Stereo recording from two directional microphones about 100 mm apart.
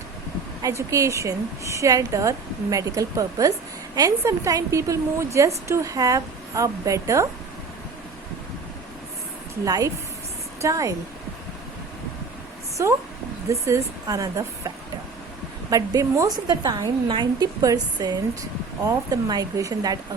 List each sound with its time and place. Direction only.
0.6 s a woman's voice: 30° right (ahead or behind)
9.6 s a woman's voice: 35° right (ahead or behind)
12.8 s a woman's voice: 30° right (ahead or behind)
15.7 s a woman's voice: 35° right (ahead or behind)